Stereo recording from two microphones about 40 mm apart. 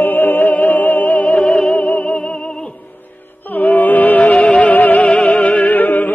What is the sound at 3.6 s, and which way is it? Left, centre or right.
Music, left.